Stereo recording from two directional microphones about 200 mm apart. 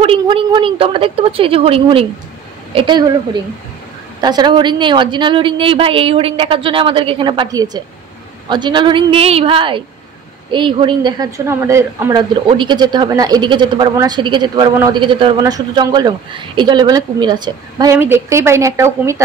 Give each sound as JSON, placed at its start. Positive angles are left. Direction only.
{"t": 0.0, "sound": "a woman's voice", "side_deg": -25}
{"t": 4.2, "sound": "a woman's voice", "side_deg": -20}